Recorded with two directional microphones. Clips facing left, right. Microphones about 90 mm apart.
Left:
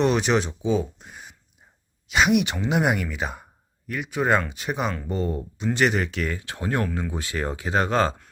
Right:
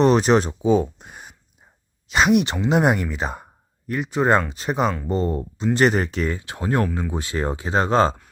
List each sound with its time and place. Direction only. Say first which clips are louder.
0.0 s speech: right 5 dB; 40° right (ahead or behind)
2.0 s speech: right 3 dB; 35° right (ahead or behind)